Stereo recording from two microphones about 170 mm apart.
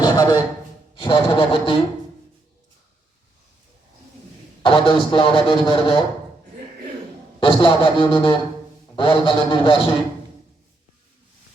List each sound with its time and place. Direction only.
0.0 s a sound: 20° left (ahead or behind)
0.9 s speech: 30° left (ahead or behind)
4.6 s a man's voice: 30° left (ahead or behind)
7.3 s a man's voice: 30° left (ahead or behind)